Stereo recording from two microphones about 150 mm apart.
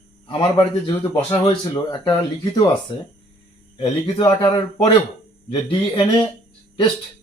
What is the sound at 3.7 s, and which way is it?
A man's voice, 35° left (ahead or behind).